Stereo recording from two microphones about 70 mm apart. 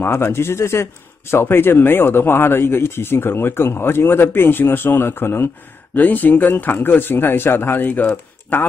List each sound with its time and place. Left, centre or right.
0.0 s speech: left